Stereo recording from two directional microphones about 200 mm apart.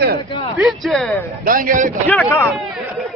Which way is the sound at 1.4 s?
45° right (ahead or behind).